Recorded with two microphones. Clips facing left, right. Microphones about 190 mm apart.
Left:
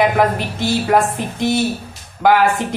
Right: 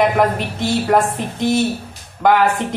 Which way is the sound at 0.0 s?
5° left (ahead or behind).